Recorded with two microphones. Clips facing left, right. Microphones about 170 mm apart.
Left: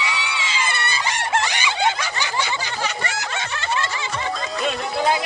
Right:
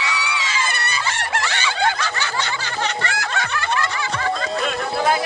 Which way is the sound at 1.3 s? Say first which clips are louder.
Left 2 dB; 15° left (ahead or behind).